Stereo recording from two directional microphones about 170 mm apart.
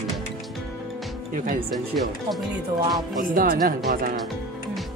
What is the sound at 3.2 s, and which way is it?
Speech, 55° right (ahead or behind).